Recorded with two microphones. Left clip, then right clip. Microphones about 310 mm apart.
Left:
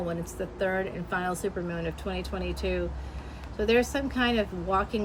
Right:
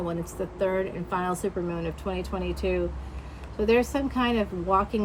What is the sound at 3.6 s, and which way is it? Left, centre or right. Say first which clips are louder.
Speech: right 2 dB; centre.